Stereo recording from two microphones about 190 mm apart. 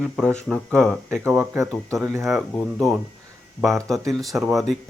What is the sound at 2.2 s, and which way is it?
Speech, centre (ahead or behind).